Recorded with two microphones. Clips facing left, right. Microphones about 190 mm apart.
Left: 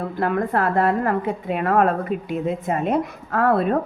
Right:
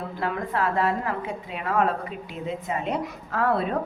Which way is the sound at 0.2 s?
55° left (ahead or behind).